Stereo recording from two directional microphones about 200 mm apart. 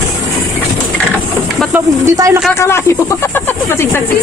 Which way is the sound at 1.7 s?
15° right (ahead or behind).